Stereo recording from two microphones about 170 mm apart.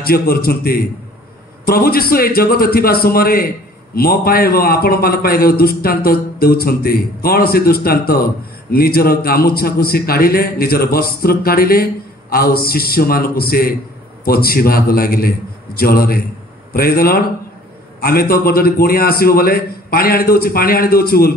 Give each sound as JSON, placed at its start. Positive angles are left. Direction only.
{"t": 0.0, "sound": "a man's voice", "side_deg": 60}